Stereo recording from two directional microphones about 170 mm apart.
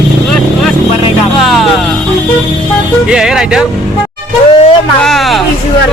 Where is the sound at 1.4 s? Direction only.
Centre (ahead or behind).